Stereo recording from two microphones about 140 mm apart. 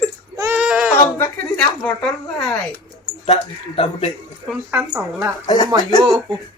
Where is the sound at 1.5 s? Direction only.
5° left (ahead or behind).